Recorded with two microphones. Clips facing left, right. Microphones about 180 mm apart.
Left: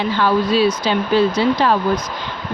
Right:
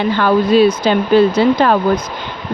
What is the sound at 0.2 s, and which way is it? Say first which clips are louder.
Speech: right 5 dB; 55° right (ahead or behind).